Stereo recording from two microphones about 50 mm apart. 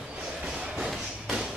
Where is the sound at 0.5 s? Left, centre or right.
Centre.